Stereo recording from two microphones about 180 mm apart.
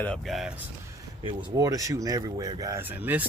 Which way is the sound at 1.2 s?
20° right (ahead or behind).